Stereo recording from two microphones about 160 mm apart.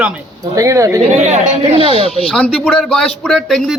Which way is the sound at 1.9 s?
35° left (ahead or behind).